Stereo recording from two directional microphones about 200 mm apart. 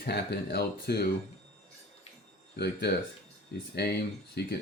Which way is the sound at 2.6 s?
55° left (ahead or behind).